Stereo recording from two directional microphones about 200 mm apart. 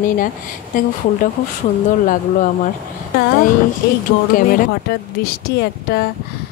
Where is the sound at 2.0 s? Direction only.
40° left (ahead or behind).